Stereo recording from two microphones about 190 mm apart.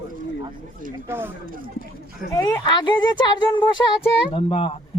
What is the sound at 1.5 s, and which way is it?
Speech, 50° right (ahead or behind).